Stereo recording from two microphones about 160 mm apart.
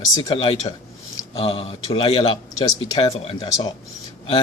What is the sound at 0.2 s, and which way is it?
A man's voice, 30° left (ahead or behind).